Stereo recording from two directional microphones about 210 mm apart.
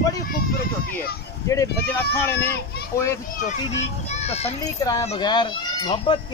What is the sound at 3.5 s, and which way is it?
A child's voice, 30° left (ahead or behind).